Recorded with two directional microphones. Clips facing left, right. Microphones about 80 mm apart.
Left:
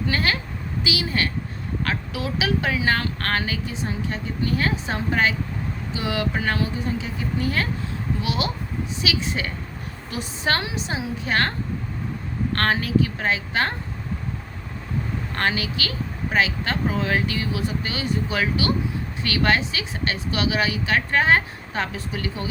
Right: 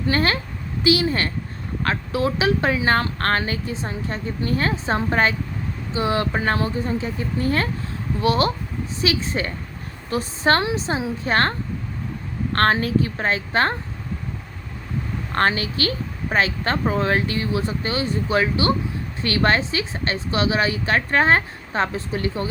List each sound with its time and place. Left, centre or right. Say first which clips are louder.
0.1 s speech: right 5 dB; right
12.5 s speech: right 3 dB; right
15.3 s speech: right 5 dB; right